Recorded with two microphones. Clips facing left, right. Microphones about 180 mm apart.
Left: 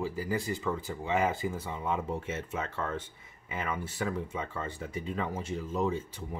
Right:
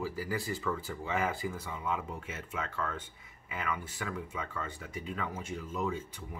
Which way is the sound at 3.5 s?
30° left (ahead or behind).